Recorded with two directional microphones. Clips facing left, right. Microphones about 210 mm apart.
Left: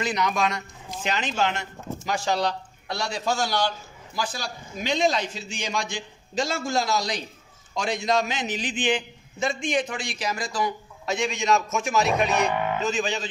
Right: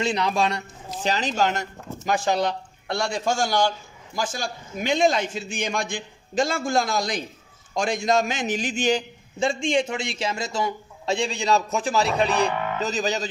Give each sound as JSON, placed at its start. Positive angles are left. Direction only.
{"t": 0.0, "sound": "a man's voice", "side_deg": -30}
{"t": 2.0, "sound": "a man's voice", "side_deg": -50}
{"t": 9.4, "sound": "a man's voice", "side_deg": -30}